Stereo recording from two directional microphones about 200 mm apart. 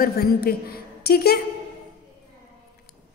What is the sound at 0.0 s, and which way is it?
A woman's voice, 50° left (ahead or behind).